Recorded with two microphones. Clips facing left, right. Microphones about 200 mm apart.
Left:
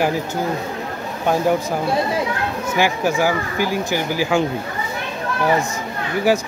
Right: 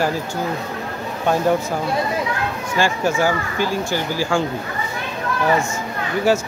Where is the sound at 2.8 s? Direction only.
15° left (ahead or behind).